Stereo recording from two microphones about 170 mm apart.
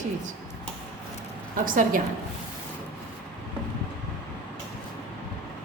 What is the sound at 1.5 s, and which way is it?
Speech, 55° right (ahead or behind).